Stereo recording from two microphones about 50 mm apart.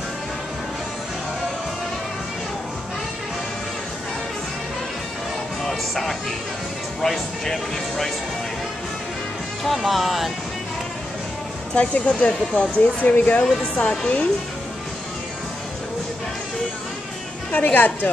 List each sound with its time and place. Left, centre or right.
5.6 s music: centre
7.0 s speech: centre
9.7 s speech: centre
11.7 s speech: left
17.5 s a woman's voice: left